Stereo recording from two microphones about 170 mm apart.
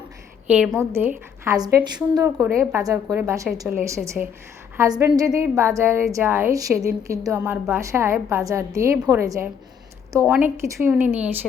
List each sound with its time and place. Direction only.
0.4 s a woman's voice: 5° right (ahead or behind)